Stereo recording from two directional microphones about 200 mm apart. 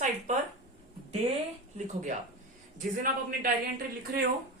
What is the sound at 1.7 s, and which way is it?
A woman's voice, 35° right (ahead or behind).